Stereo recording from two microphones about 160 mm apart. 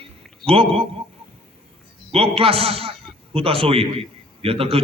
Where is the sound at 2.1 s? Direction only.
35° right (ahead or behind).